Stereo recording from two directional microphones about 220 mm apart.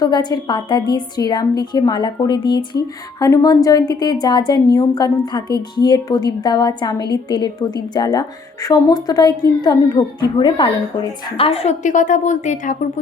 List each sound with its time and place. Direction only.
0.0 s a woman's voice: 20° left (ahead or behind); by 12.9 s 35° left (ahead or behind)